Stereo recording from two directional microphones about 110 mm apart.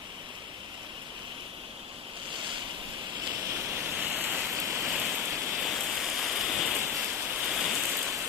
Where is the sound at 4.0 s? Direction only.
15° right (ahead or behind).